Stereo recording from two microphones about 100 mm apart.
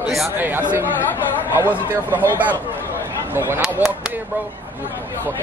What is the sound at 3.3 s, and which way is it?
Speech, 25° right (ahead or behind).